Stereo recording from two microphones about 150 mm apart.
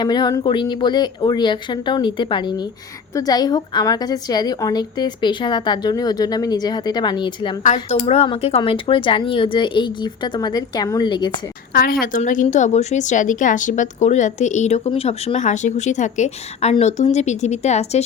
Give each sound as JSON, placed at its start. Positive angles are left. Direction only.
{"t": 0.0, "sound": "a woman's voice", "side_deg": 30}
{"t": 7.6, "sound": "a woman's voice", "side_deg": 55}
{"t": 8.0, "sound": "speech", "side_deg": 40}
{"t": 11.7, "sound": "a woman's voice", "side_deg": 80}